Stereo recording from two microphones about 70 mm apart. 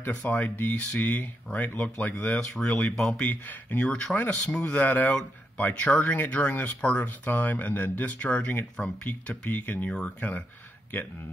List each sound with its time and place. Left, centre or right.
0.0 s speech: centre
3.8 s speech: centre
9.8 s speech: centre